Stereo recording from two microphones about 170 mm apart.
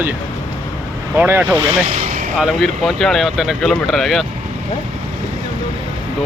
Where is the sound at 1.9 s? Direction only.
45° right (ahead or behind).